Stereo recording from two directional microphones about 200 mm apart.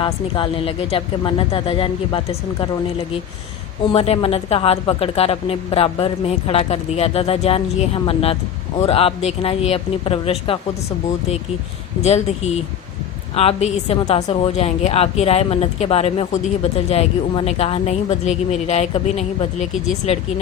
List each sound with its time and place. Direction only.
0.0 s a woman's voice: 25° left (ahead or behind)
3.9 s a woman's voice: 30° left (ahead or behind)
12.0 s speech: 35° left (ahead or behind)